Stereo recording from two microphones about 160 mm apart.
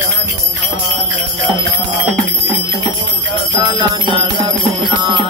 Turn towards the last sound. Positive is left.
turn(degrees=-30)  # may be behind; listen again after turning